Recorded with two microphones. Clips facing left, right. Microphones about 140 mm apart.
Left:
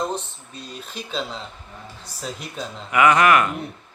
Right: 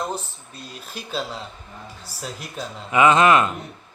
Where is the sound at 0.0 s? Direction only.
5° right (ahead or behind).